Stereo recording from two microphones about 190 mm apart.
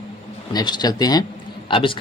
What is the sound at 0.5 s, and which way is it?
A man's voice, 20° left (ahead or behind).